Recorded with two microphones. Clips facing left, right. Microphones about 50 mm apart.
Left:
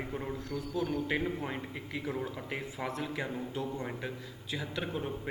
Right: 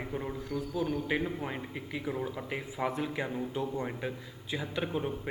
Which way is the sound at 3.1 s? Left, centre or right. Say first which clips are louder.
Right 2 dB; centre.